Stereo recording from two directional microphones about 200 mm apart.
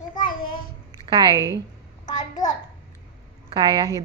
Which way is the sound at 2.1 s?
40° left (ahead or behind).